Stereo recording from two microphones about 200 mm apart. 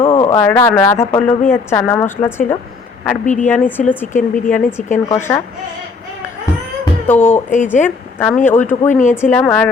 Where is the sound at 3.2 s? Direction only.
40° left (ahead or behind).